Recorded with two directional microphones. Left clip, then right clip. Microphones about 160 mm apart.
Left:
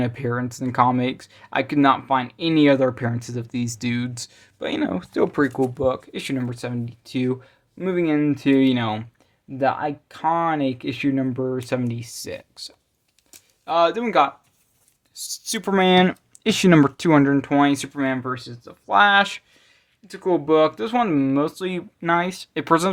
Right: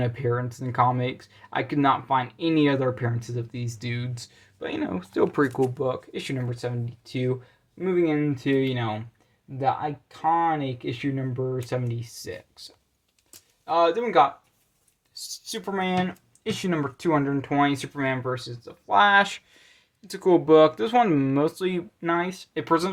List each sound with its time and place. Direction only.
0.0 s speech: 30° left (ahead or behind); by 15.7 s 50° left (ahead or behind)
15.7 s speech: 65° left (ahead or behind); by 19.6 s 10° left (ahead or behind)
19.6 s speech: 5° right (ahead or behind); by 21.8 s 15° left (ahead or behind)
22.0 s speech: 35° left (ahead or behind)